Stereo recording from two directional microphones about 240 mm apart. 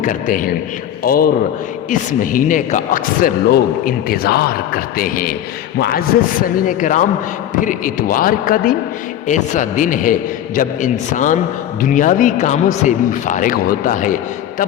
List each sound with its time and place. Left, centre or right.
0.0 s a man's voice: left